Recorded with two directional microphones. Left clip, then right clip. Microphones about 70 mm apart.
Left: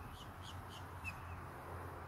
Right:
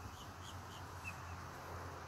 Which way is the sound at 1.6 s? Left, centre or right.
Right.